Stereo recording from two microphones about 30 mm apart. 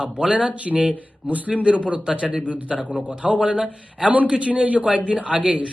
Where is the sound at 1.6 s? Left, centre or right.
Right.